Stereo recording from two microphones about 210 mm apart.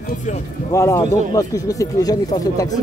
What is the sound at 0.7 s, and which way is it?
A man's voice, 15° left (ahead or behind).